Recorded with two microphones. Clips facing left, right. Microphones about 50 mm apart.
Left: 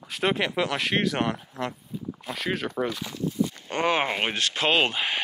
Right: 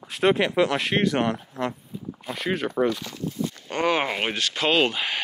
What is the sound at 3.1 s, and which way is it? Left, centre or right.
Speech, centre.